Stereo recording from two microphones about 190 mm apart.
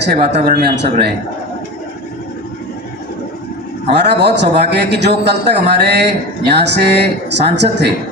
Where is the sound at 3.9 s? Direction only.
65° right (ahead or behind).